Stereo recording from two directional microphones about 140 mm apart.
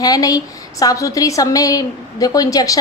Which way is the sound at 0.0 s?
25° left (ahead or behind).